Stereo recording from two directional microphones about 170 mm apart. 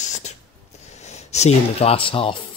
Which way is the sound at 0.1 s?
45° left (ahead or behind).